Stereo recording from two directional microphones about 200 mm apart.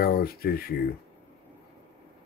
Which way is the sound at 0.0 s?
50° left (ahead or behind).